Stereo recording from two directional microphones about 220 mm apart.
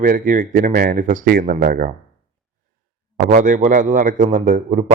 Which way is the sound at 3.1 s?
35° right (ahead or behind).